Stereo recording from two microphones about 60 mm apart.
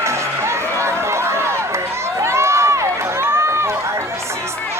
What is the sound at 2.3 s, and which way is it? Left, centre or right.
Run, right.